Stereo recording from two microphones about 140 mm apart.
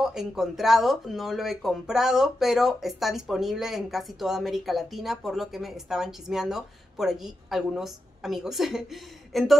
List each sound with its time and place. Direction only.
0.0 s a woman's voice: 5° right (ahead or behind)